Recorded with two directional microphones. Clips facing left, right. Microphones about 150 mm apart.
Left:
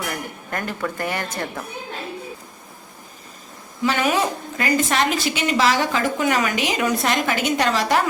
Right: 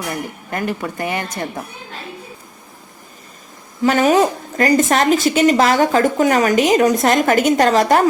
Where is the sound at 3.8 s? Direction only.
40° right (ahead or behind).